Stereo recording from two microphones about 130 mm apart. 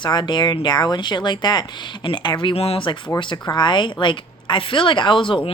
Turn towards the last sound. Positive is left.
turn(degrees=40)  # may be behind; listen again after turning